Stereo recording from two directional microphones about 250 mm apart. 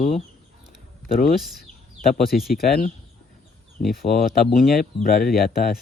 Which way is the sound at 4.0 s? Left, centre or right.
Left.